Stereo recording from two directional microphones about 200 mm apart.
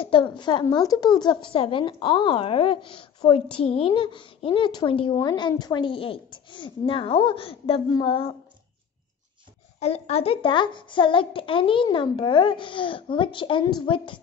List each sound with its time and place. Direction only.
0.0 s speech: 25° left (ahead or behind)
9.8 s speech: 30° left (ahead or behind)